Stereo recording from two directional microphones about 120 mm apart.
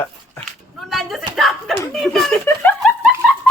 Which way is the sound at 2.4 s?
20° left (ahead or behind).